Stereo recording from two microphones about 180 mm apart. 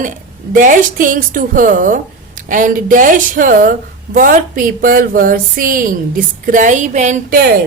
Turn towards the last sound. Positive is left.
turn(degrees=-40)  # may be behind; listen again after turning